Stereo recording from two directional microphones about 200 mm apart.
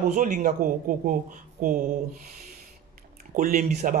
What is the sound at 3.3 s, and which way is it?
Speech, 45° right (ahead or behind).